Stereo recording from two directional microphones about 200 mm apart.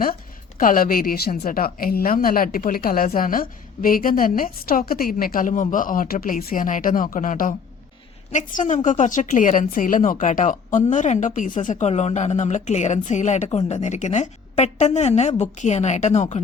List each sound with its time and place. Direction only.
0.6 s a woman's voice: 45° left (ahead or behind)